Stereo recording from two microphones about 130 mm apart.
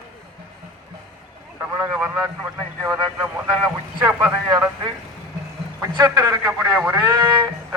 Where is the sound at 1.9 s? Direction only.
25° right (ahead or behind).